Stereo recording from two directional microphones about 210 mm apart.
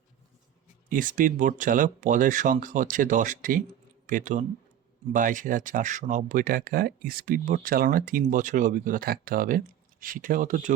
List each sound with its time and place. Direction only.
0.9 s speech: 40° right (ahead or behind)